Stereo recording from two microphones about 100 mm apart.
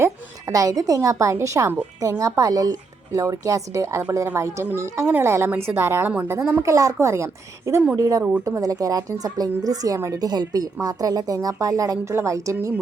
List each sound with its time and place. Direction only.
0.0 s a woman's voice: 35° right (ahead or behind)